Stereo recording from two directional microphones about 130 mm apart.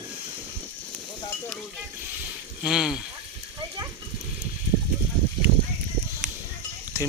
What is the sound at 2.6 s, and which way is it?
Speech, 5° right (ahead or behind).